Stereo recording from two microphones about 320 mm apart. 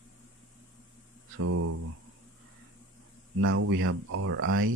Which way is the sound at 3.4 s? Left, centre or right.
Right.